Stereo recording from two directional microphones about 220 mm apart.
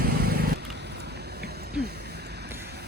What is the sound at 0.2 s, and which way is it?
Vehicle, 45° right (ahead or behind).